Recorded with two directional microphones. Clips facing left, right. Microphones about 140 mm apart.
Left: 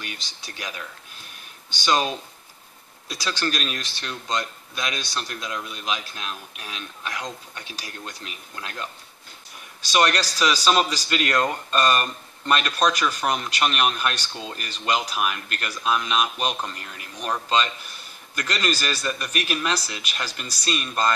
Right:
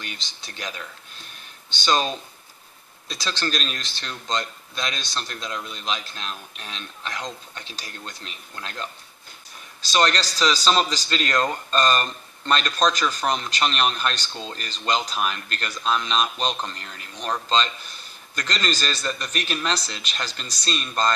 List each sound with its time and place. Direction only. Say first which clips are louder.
0.0 s speech: left 1 dB; 10° left (ahead or behind)
9.9 s speech: even; 10° left (ahead or behind)